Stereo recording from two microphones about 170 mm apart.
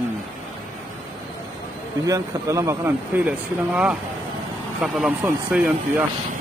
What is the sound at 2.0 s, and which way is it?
Speech, 20° right (ahead or behind).